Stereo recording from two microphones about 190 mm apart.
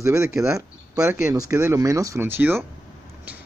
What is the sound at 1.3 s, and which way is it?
Speech, 15° right (ahead or behind).